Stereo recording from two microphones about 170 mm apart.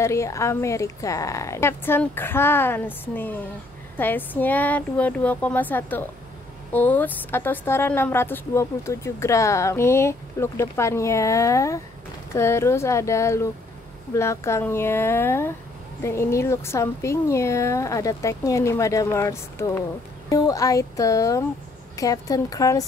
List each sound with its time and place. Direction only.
0.0 s speech: 15° left (ahead or behind)